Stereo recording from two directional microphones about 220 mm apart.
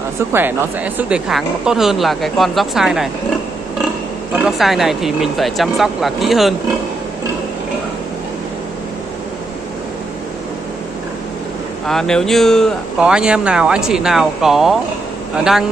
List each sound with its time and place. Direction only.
0.3 s speech: 10° right (ahead or behind)
4.4 s speech: centre (ahead or behind)
11.8 s speech: centre (ahead or behind)